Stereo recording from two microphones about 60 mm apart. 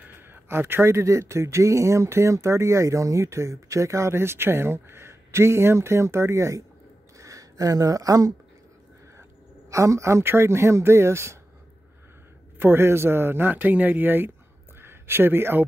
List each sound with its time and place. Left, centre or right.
0.3 s speech: right
7.2 s speech: right
9.7 s speech: right
12.5 s speech: right
14.8 s a sound: right